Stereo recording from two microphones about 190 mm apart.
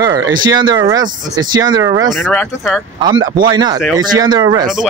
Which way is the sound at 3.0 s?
25° right (ahead or behind).